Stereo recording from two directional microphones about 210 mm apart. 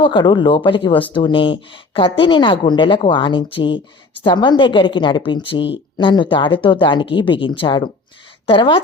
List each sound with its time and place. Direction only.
0.0 s speech: 20° left (ahead or behind)